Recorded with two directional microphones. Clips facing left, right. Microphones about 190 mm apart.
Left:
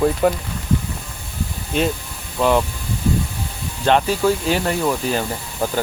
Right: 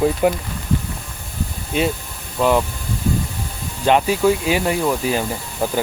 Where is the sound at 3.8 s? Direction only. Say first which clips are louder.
Right 1 dB; 10° right (ahead or behind).